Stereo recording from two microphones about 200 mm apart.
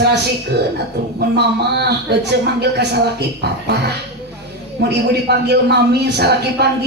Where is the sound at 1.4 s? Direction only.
55° right (ahead or behind).